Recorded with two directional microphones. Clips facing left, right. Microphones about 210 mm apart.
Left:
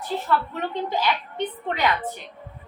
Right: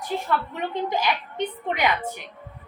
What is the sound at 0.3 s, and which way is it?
A woman's voice, 15° right (ahead or behind).